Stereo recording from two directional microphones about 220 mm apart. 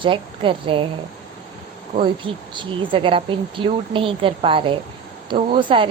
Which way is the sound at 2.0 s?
25° right (ahead or behind).